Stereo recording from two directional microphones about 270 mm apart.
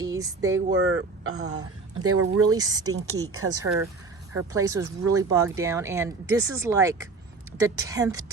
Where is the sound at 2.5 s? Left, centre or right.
Centre.